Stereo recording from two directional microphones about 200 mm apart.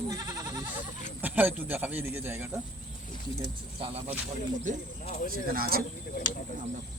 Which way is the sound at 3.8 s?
30° right (ahead or behind).